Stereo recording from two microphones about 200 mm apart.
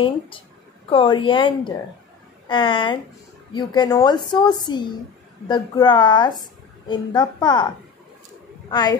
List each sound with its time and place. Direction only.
0.8 s a woman's voice: 25° left (ahead or behind)